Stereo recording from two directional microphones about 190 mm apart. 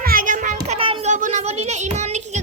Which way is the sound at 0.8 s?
30° right (ahead or behind).